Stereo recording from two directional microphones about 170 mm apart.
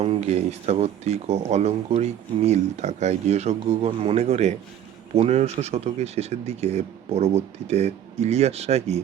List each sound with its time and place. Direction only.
0.0 s speech: 40° right (ahead or behind)